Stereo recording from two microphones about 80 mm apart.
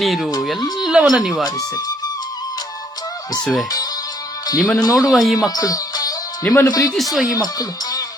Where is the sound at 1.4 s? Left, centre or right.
Left.